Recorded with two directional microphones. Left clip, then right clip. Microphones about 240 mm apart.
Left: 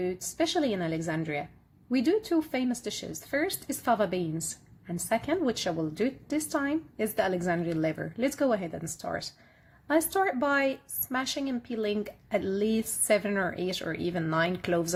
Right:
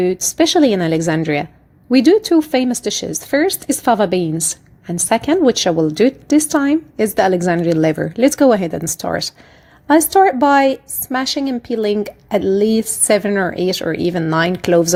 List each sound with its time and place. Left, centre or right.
0.0 s a woman's voice: right